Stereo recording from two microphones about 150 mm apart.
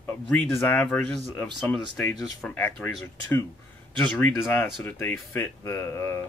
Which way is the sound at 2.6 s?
15° left (ahead or behind).